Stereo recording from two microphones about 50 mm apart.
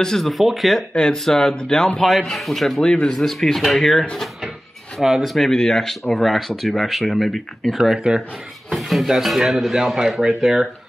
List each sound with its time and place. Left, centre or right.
0.0 s speech: centre
0.7 s speech: centre
2.0 s speech: centre
2.8 s speech: centre
3.2 s speech: centre
5.0 s speech: centre
5.5 s speech: centre
7.7 s speech: centre
8.6 s speech: centre